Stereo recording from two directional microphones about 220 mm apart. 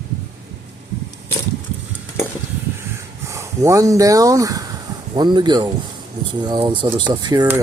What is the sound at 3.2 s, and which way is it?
Speech, 15° right (ahead or behind).